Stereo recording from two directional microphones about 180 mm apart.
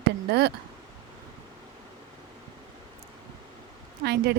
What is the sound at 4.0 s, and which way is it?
Speech, 65° right (ahead or behind).